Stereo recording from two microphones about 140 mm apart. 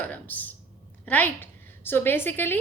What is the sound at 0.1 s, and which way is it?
A woman's voice, 10° left (ahead or behind).